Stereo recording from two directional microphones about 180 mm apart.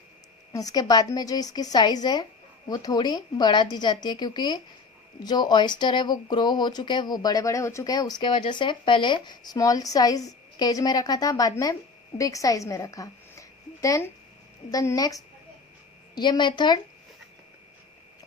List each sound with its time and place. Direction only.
0.5 s speech: 20° left (ahead or behind)